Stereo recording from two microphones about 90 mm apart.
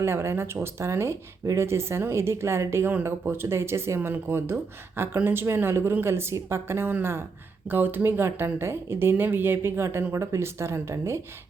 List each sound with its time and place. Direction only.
0.0 s speech: 30° right (ahead or behind)